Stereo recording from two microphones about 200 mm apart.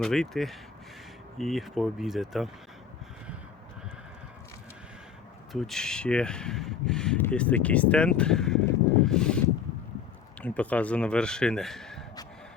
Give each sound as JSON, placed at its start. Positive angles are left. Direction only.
{"t": 0.0, "sound": "speech", "side_deg": 0}
{"t": 5.5, "sound": "speech", "side_deg": 0}
{"t": 10.4, "sound": "speech", "side_deg": 5}